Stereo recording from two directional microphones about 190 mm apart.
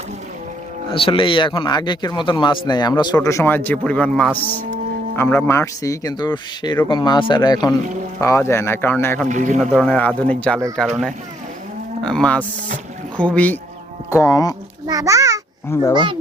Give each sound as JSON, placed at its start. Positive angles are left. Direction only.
{"t": 0.9, "sound": "speech", "side_deg": 30}
{"t": 9.3, "sound": "a man's voice", "side_deg": -40}
{"t": 9.6, "sound": "speech", "side_deg": 5}
{"t": 14.8, "sound": "a child's voice", "side_deg": -20}
{"t": 15.7, "sound": "speech", "side_deg": 15}